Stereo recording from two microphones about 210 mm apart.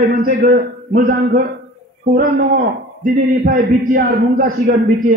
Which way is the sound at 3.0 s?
40° right (ahead or behind).